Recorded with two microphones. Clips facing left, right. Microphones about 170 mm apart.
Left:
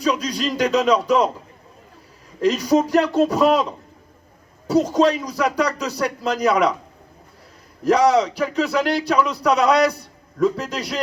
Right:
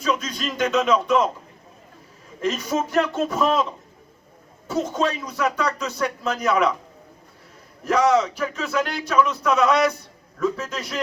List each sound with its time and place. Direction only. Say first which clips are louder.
0.0 s speech: left 4 dB; 35° left (ahead or behind)
2.4 s speech: left 7 dB; 35° left (ahead or behind)
4.7 s speech: left 7 dB; 35° left (ahead or behind)
7.9 s speech: left 3 dB; 35° left (ahead or behind)